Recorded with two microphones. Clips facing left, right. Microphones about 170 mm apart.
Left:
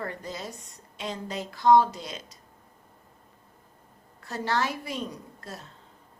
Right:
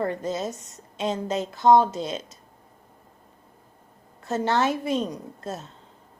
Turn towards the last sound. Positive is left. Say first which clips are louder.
# right 8 dB
turn(degrees=-25)  # may be behind; listen again after turning